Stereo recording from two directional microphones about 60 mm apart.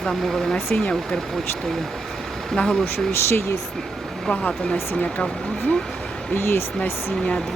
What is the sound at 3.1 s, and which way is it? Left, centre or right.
Speech, left.